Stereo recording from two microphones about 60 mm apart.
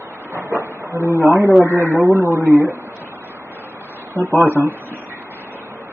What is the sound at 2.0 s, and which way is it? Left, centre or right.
Speech, right.